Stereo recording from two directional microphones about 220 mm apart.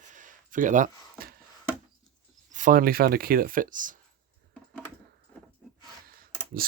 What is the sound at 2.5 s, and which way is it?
Speech, 35° right (ahead or behind).